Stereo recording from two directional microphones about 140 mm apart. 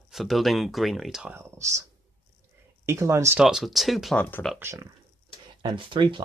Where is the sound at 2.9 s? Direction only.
20° right (ahead or behind).